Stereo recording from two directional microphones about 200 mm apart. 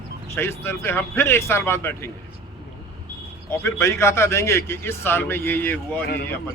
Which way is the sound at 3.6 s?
15° left (ahead or behind).